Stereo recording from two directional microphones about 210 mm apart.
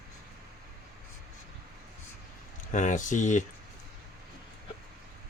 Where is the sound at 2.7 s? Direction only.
35° left (ahead or behind).